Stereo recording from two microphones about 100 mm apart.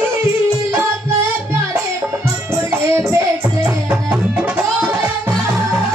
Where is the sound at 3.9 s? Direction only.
10° right (ahead or behind).